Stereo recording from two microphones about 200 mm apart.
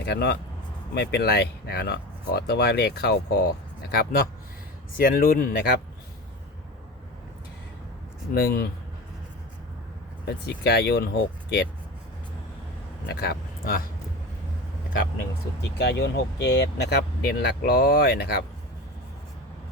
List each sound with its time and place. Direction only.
0.0 s speech: 55° left (ahead or behind)
8.4 s speech: 50° left (ahead or behind)
10.2 s speech: 55° left (ahead or behind)
13.1 s speech: 50° left (ahead or behind)
15.8 s speech: 55° left (ahead or behind)